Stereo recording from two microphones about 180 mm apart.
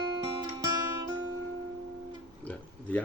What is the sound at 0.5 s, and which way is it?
Music, 20° right (ahead or behind).